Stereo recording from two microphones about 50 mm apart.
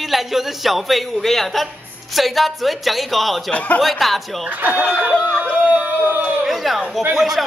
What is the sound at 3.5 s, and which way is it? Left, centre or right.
Speech, left.